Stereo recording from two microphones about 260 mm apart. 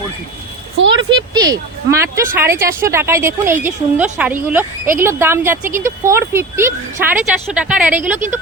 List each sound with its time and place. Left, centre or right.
0.8 s speech: right
1.1 s a woman's voice: centre